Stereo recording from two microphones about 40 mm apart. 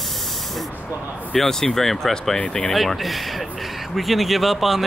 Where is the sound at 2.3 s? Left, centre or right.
Left.